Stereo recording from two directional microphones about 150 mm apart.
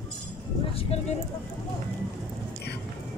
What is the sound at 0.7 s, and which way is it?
Speech, 45° left (ahead or behind).